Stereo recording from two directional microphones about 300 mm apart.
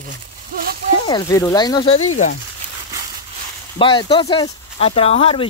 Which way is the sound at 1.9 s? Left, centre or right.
Left.